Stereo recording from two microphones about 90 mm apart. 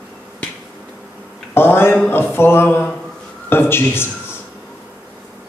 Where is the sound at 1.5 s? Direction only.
25° left (ahead or behind).